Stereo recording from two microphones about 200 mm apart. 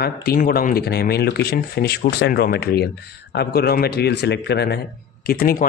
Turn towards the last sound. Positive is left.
turn(degrees=45)  # may be behind; listen again after turning